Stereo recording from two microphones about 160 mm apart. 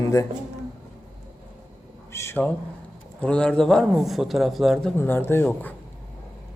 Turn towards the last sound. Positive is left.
turn(degrees=10)  # may be behind; listen again after turning